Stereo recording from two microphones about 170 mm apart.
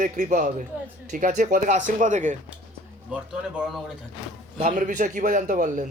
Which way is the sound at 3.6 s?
Centre (ahead or behind).